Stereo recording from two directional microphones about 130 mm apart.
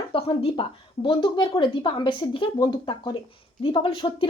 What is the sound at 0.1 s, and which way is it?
A woman's voice, 45° left (ahead or behind).